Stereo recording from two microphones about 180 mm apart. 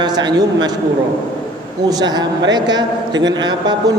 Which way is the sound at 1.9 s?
20° right (ahead or behind).